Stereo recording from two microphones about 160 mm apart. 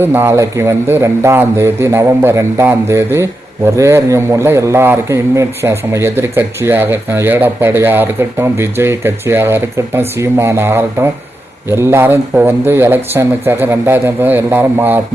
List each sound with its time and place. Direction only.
0.0 s a man's voice: 15° right (ahead or behind)